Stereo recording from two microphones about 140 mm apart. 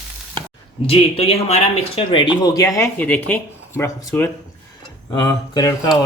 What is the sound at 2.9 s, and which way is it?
Speech, 10° left (ahead or behind).